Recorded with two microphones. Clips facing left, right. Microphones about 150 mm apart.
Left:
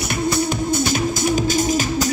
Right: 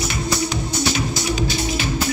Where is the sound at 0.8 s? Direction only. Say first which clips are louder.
Left 3 dB; 50° left (ahead or behind).